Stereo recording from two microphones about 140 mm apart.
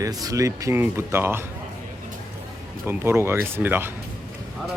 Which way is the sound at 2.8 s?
20° right (ahead or behind).